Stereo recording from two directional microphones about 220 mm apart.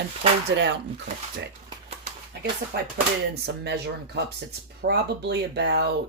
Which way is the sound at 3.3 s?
50° right (ahead or behind).